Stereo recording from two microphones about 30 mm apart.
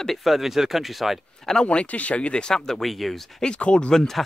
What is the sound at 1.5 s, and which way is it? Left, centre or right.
Speech, centre.